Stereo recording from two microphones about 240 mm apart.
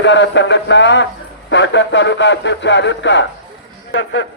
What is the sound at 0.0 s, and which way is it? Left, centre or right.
A man's voice, left.